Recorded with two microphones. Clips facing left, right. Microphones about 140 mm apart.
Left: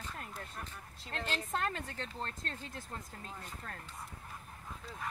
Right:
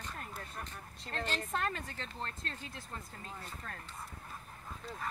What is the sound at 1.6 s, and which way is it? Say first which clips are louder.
Speech: even; 30° left (ahead or behind).